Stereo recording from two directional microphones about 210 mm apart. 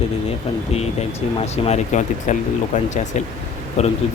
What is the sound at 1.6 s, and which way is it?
Speech, 35° left (ahead or behind).